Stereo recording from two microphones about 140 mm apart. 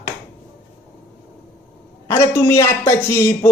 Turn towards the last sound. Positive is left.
turn(degrees=20)  # may be behind; listen again after turning